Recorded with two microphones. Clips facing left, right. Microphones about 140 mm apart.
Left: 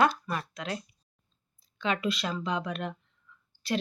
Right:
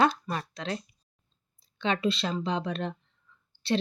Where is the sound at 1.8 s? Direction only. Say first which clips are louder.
Right 2 dB; 30° right (ahead or behind).